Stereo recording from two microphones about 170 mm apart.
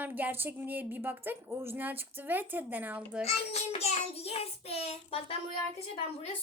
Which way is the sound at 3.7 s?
35° left (ahead or behind).